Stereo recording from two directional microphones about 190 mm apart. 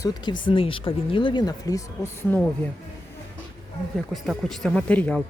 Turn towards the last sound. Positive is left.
turn(degrees=5)  # may be behind; listen again after turning